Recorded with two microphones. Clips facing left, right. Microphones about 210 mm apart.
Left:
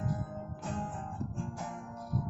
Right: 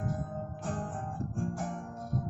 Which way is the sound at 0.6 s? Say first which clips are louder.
Right 1 dB; 50° right (ahead or behind).